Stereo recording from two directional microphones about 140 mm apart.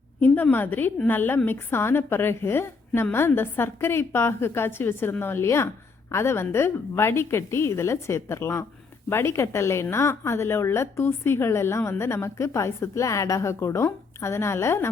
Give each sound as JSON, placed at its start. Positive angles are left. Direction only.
{"t": 0.5, "sound": "a woman's voice", "side_deg": 15}